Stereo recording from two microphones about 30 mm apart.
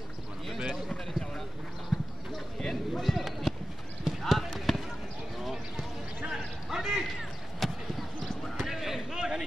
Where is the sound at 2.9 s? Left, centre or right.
Centre.